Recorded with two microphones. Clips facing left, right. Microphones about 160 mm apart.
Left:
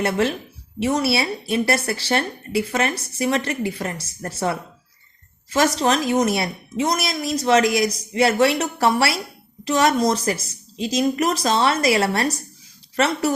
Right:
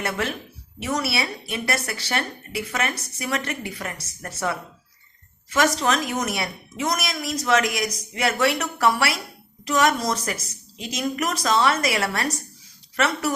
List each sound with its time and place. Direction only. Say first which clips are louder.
0.0 s a woman's voice: left 6 dB; 30° left (ahead or behind)